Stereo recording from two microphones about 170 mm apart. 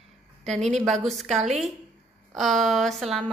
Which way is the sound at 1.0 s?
Centre (ahead or behind).